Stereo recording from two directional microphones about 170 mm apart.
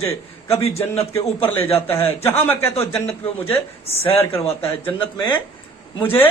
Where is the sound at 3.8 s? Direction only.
35° left (ahead or behind).